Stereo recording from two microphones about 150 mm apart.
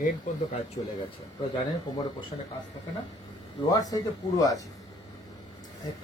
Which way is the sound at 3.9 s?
25° left (ahead or behind).